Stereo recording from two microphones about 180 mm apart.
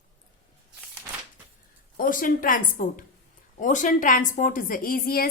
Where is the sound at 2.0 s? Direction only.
50° left (ahead or behind).